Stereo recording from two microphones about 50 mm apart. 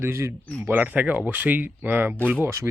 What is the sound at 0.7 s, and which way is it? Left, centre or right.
Speech, right.